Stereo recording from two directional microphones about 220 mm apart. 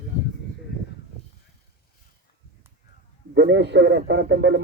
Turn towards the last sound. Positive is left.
turn(degrees=-50)  # may be behind; listen again after turning